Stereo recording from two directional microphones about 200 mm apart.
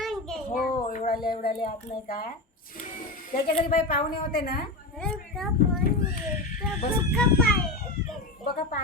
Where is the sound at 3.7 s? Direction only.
45° left (ahead or behind).